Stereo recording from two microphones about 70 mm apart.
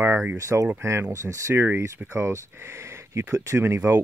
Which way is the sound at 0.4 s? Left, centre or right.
Right.